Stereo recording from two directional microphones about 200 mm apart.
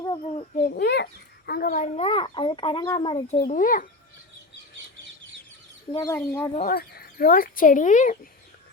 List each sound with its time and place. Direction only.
0.0 s a sound: 25° left (ahead or behind)
0.5 s a child's voice: 40° left (ahead or behind); by 3.3 s 25° left (ahead or behind)
3.3 s speech: 40° left (ahead or behind)
5.9 s speech: 20° left (ahead or behind)
6.7 s speech: 50° left (ahead or behind)